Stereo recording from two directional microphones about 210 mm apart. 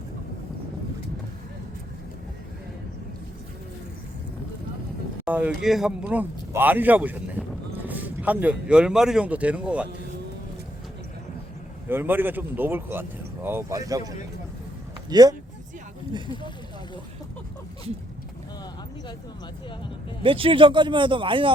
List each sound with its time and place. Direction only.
5.2 s speech: 5° right (ahead or behind)
11.9 s speech: 10° right (ahead or behind)
15.1 s speech: 20° right (ahead or behind)
20.2 s speech: 25° right (ahead or behind)